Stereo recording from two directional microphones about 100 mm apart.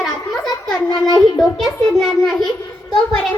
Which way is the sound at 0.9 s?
45° left (ahead or behind).